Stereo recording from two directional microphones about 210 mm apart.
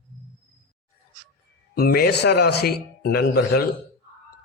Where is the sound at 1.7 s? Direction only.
45° left (ahead or behind).